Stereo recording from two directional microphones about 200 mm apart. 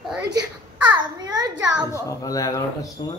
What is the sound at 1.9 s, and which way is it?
Speech, 15° left (ahead or behind).